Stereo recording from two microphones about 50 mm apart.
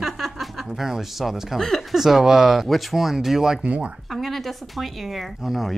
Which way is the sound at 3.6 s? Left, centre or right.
Right.